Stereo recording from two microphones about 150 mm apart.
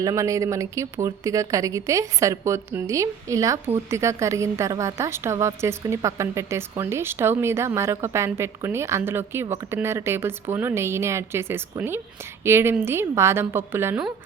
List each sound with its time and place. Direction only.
0.0 s a woman's voice: 20° right (ahead or behind)